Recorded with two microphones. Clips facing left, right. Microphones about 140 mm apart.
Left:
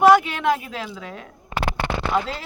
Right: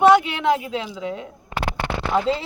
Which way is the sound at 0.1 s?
20° right (ahead or behind).